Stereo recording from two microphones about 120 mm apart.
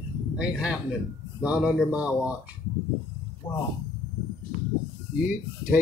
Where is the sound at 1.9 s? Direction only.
10° right (ahead or behind).